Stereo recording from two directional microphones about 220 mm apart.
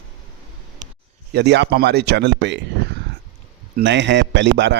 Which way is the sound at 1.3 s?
50° right (ahead or behind).